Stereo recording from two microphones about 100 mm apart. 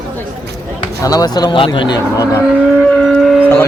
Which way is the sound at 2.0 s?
25° right (ahead or behind).